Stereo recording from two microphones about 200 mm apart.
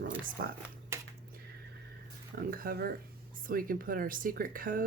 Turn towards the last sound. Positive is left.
turn(degrees=-45)  # may be behind; listen again after turning